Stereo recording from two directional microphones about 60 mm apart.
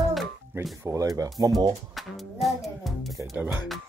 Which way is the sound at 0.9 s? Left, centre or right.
Right.